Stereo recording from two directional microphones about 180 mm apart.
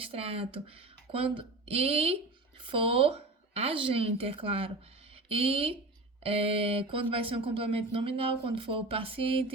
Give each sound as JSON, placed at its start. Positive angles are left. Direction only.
{"t": 0.1, "sound": "speech", "side_deg": -35}